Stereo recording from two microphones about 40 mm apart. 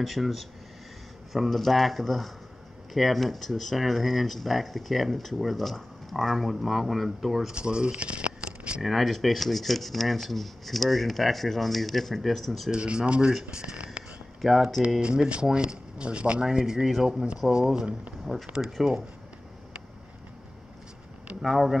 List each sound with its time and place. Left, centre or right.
0.0 s speech: centre
7.5 s speech: right
8.8 s speech: centre
12.7 s speech: right
14.4 s speech: centre
15.0 s speech: right
16.4 s speech: centre
18.3 s speech: centre
21.4 s speech: centre